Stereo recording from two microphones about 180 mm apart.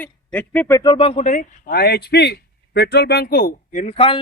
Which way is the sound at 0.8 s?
30° left (ahead or behind).